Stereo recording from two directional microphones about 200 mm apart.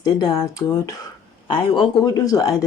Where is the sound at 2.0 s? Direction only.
20° left (ahead or behind).